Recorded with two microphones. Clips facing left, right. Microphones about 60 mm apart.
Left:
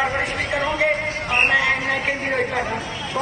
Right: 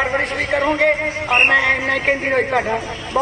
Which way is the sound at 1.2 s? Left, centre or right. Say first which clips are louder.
Right 5 dB; right.